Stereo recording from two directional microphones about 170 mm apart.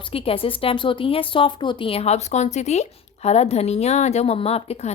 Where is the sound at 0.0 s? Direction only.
35° left (ahead or behind).